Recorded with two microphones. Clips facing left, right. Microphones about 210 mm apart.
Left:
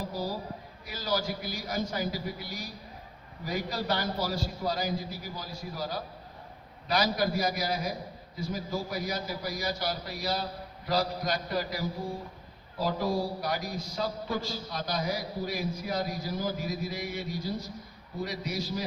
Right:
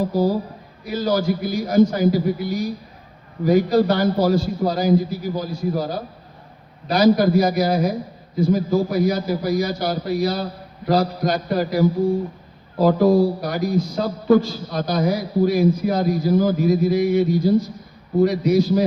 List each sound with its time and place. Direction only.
0.0 s a man's voice: 55° right (ahead or behind)
7.0 s a man's voice: 55° right (ahead or behind)